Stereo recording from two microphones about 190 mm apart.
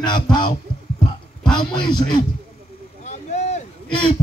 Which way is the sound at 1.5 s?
25° left (ahead or behind).